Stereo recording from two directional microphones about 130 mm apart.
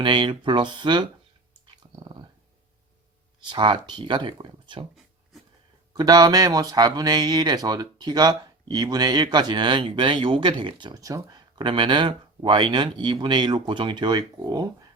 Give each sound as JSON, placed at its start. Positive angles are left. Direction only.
{"t": 0.0, "sound": "speech", "side_deg": -40}
{"t": 1.6, "sound": "dog", "side_deg": -35}
{"t": 3.5, "sound": "speech", "side_deg": -35}
{"t": 5.9, "sound": "speech", "side_deg": -30}